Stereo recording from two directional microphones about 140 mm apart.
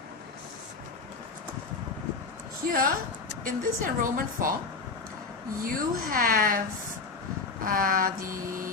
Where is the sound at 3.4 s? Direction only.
75° right (ahead or behind).